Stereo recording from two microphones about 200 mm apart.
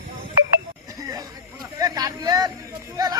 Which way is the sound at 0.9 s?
15° right (ahead or behind).